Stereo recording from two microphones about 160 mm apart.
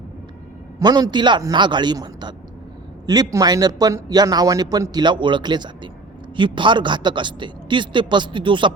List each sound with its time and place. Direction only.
0.8 s speech: 25° right (ahead or behind)